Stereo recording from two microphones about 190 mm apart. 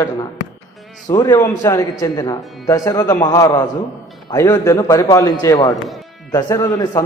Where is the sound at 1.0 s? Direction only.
15° left (ahead or behind).